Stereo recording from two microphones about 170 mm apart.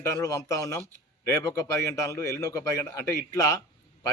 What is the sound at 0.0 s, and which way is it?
A man's voice, 20° left (ahead or behind).